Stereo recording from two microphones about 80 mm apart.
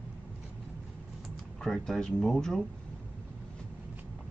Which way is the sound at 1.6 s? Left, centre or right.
Centre.